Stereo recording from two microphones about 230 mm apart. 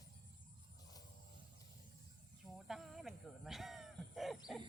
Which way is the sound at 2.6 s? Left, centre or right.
Centre.